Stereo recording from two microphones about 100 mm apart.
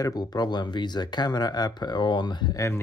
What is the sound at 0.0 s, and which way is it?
Speech, 40° left (ahead or behind).